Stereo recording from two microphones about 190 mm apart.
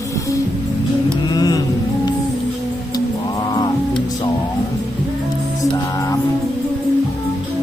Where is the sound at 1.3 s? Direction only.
20° left (ahead or behind).